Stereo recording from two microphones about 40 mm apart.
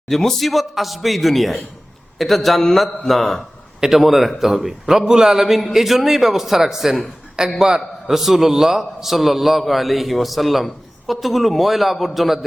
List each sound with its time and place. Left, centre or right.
0.1 s a man's voice: centre
7.4 s a man's voice: centre